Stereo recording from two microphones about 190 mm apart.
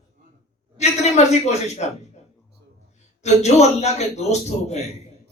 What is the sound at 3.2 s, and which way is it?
A man's voice, 35° left (ahead or behind).